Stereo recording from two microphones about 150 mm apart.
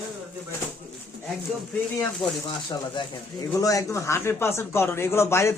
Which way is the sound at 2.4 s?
30° left (ahead or behind).